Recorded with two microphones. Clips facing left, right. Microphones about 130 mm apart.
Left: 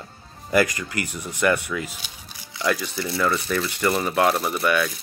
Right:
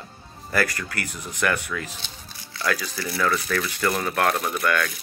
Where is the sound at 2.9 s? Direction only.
25° left (ahead or behind).